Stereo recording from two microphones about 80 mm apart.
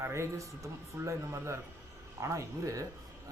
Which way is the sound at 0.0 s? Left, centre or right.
Right.